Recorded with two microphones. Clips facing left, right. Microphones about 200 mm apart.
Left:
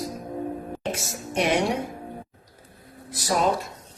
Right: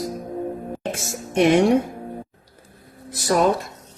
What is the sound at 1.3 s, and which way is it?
Speech, 45° right (ahead or behind).